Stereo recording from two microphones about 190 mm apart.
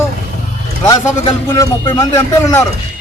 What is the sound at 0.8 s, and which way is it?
Speech, 20° left (ahead or behind).